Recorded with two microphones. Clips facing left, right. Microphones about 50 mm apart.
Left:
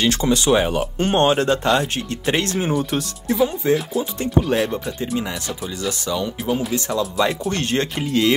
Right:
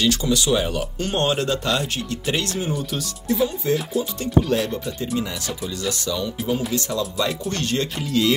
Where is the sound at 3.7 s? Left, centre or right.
Centre.